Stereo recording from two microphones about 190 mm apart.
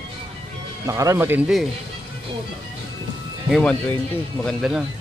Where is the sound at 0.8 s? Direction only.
15° right (ahead or behind).